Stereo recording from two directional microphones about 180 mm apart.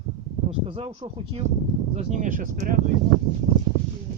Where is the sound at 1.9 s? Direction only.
45° right (ahead or behind).